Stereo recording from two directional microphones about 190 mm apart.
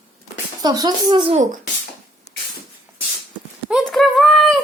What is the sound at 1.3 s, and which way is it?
Speech, 40° right (ahead or behind).